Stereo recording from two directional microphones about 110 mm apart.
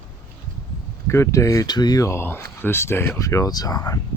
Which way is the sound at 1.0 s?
25° left (ahead or behind).